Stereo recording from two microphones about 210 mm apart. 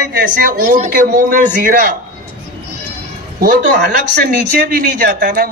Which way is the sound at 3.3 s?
50° right (ahead or behind).